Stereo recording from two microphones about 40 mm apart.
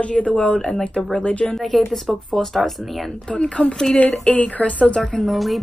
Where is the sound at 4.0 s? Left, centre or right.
Left.